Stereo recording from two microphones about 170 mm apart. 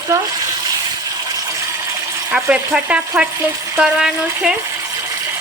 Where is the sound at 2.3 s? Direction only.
5° right (ahead or behind).